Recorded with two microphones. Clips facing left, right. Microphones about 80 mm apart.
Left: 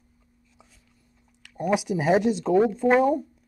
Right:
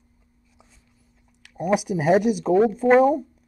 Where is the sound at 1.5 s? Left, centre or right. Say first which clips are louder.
Right 2 dB; centre.